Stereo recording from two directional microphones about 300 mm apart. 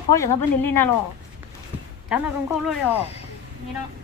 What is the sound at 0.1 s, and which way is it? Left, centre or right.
Speech, centre.